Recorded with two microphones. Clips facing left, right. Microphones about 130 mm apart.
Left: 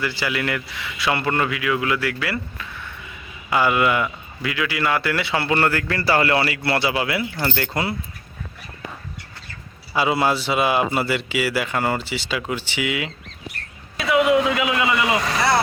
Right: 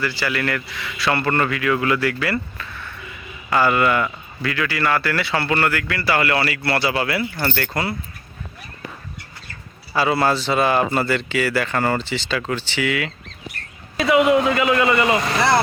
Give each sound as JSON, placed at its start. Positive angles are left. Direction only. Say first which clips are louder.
{"t": 0.0, "sound": "a man's voice", "louder": "right 1 dB", "side_deg": 20}
{"t": 9.9, "sound": "speech", "louder": "right 1 dB", "side_deg": 15}
{"t": 13.9, "sound": "a man's voice", "louder": "right 2 dB", "side_deg": 0}